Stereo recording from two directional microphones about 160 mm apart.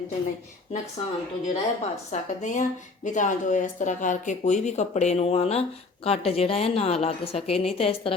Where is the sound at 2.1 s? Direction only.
50° left (ahead or behind).